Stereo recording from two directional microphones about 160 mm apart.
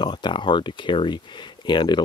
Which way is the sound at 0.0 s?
30° left (ahead or behind).